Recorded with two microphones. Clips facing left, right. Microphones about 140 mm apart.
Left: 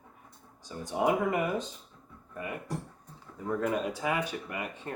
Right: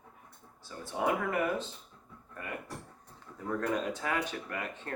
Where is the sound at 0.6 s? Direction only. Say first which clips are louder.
Left 4 dB; 15° left (ahead or behind).